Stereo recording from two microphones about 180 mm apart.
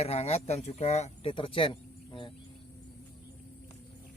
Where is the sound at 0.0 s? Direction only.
35° left (ahead or behind).